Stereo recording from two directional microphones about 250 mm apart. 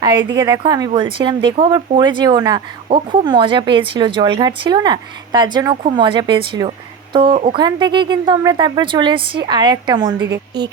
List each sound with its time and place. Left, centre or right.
0.0 s a woman's voice: centre